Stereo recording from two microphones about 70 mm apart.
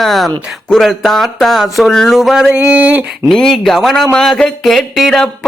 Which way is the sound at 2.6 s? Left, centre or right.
Right.